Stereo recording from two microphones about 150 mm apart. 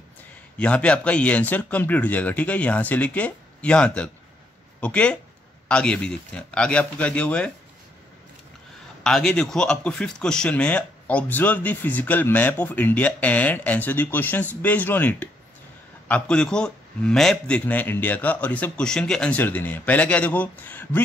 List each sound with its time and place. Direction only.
0.6 s a man's voice: 10° left (ahead or behind)
9.0 s a man's voice: 5° left (ahead or behind)